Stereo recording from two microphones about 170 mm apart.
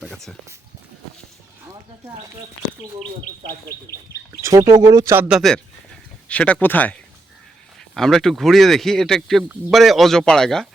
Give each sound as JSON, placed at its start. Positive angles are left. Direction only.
{"t": 0.0, "sound": "speech", "side_deg": 0}
{"t": 4.3, "sound": "speech", "side_deg": -20}
{"t": 5.3, "sound": "speech", "side_deg": 0}
{"t": 7.9, "sound": "speech", "side_deg": 0}